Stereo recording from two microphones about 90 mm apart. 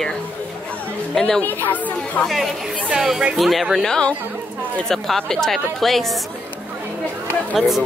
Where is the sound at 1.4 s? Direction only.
20° left (ahead or behind).